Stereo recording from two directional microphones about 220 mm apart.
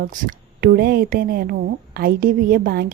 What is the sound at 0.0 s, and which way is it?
A woman's voice, 40° right (ahead or behind).